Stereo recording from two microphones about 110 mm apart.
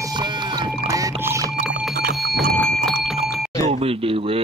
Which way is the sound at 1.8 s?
Centre (ahead or behind).